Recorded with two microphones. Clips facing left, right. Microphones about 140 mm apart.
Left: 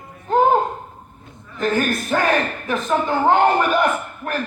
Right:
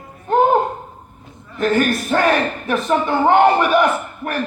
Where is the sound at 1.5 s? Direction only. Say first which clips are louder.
Right 3 dB; 65° right (ahead or behind).